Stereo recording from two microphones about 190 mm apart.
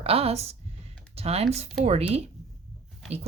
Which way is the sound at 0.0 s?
30° right (ahead or behind).